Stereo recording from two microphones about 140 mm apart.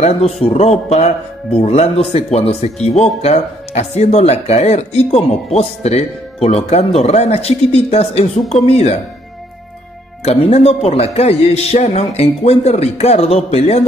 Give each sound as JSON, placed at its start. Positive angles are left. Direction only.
{"t": 0.0, "sound": "speech", "side_deg": 50}
{"t": 10.2, "sound": "speech", "side_deg": 50}